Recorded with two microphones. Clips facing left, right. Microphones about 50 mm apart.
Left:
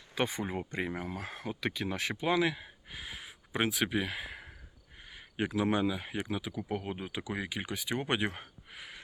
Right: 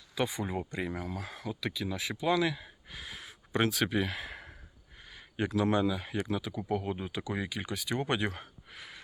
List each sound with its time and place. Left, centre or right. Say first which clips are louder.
0.1 s speech: even; left
2.2 s speech: right 1 dB; left; by 4.5 s centre
5.0 s speech: right 1 dB; centre